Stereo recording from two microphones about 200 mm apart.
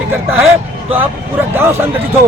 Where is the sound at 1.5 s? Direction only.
10° right (ahead or behind).